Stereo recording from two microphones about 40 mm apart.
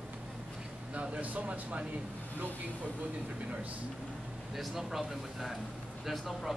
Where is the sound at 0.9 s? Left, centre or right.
Right.